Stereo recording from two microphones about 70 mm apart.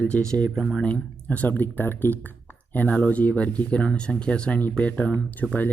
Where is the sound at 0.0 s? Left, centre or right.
Centre.